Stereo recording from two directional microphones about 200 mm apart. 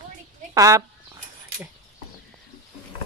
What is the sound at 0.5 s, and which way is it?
Speech, 15° right (ahead or behind).